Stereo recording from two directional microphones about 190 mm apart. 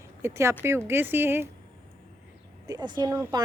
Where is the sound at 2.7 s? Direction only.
25° right (ahead or behind).